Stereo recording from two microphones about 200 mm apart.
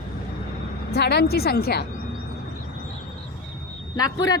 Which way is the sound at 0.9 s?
55° left (ahead or behind).